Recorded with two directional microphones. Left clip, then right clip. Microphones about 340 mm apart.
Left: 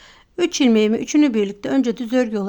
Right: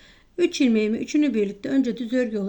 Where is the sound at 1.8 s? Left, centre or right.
Left.